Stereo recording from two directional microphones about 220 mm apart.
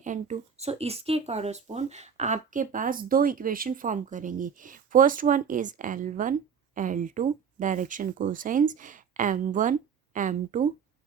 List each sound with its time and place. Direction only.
0.0 s speech: 35° right (ahead or behind)